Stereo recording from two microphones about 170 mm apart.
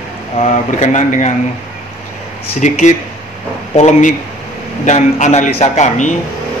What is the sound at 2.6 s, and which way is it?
Speech, 45° left (ahead or behind).